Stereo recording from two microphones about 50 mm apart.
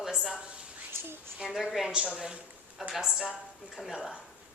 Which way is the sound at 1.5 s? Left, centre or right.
Centre.